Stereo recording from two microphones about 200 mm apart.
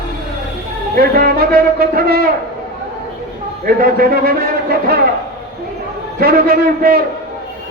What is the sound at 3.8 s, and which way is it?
Speech, 50° right (ahead or behind).